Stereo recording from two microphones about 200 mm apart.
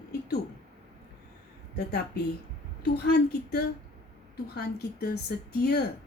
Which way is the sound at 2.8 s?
55° left (ahead or behind).